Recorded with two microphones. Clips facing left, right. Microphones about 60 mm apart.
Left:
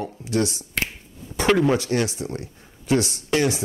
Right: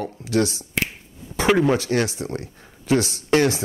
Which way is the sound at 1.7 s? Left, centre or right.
Right.